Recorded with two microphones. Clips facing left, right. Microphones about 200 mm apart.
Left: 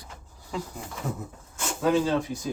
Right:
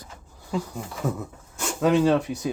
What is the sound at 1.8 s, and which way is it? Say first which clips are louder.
Speech: right 4 dB; 70° right (ahead or behind).